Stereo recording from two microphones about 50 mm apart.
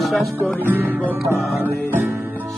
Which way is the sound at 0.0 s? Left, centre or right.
Centre.